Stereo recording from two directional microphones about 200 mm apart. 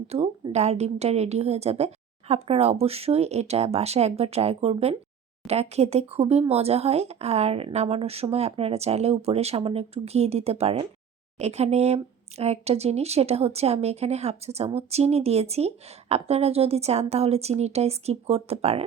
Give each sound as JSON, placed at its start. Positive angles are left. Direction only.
{"t": 0.1, "sound": "speech", "side_deg": -30}